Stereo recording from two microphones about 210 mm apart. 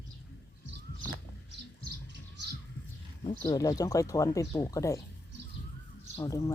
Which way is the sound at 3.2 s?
20° left (ahead or behind).